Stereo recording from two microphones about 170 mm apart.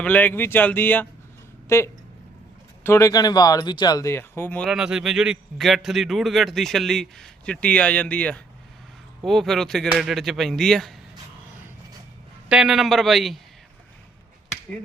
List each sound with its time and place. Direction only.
0.0 s speech: 10° left (ahead or behind)
4.7 s a man's voice: 5° right (ahead or behind)
12.5 s a man's voice: 5° right (ahead or behind)